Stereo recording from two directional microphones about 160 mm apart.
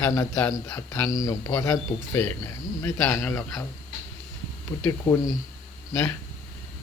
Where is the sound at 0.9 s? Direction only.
20° left (ahead or behind).